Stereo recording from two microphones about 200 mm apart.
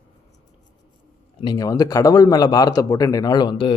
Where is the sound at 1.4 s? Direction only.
20° left (ahead or behind).